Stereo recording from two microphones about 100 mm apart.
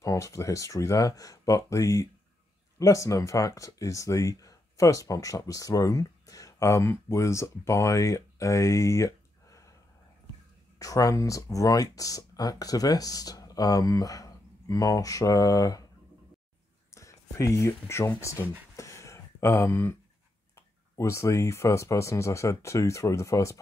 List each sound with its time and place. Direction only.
0.0 s speech: 30° left (ahead or behind)
10.8 s speech: 35° left (ahead or behind)
16.9 s speech: 30° left (ahead or behind)
18.8 s a sound: 30° left (ahead or behind)
20.9 s speech: 30° left (ahead or behind)